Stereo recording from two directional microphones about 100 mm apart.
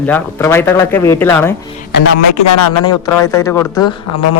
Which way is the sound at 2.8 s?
35° left (ahead or behind).